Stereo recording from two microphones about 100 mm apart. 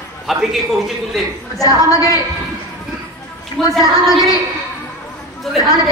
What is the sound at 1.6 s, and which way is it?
Speech, 35° left (ahead or behind).